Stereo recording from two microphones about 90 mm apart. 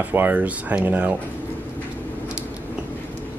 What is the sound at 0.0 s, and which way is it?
Speech, 20° right (ahead or behind).